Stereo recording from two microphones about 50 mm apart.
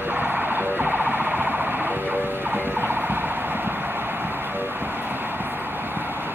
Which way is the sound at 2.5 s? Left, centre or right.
Right.